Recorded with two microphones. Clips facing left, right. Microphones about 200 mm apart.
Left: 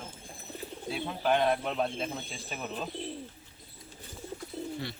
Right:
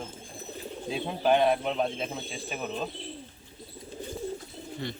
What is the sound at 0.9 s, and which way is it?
Speech, 20° right (ahead or behind).